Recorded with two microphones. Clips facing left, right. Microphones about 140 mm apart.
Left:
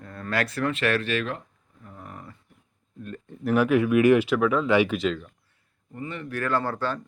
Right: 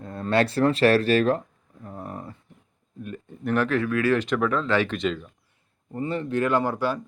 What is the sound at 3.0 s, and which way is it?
Speech, 5° right (ahead or behind).